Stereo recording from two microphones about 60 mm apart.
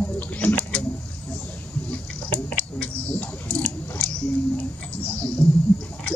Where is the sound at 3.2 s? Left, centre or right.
Left.